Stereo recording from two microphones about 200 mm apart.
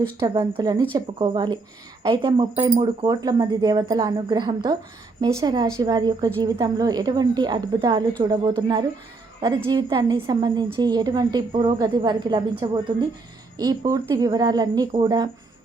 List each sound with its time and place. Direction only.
0.0 s a woman's voice: 25° right (ahead or behind)